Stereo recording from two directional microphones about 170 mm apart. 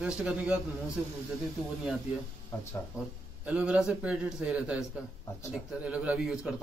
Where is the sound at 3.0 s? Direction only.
5° right (ahead or behind).